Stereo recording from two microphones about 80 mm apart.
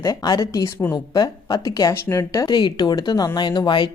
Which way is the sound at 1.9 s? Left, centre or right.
Left.